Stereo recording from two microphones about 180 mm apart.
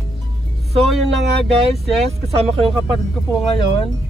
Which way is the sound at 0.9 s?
Centre (ahead or behind).